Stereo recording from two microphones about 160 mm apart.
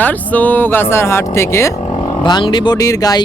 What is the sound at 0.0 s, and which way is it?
Speech, 10° left (ahead or behind).